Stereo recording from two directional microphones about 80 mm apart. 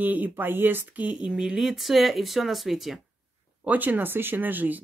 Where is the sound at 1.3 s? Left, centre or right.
Centre.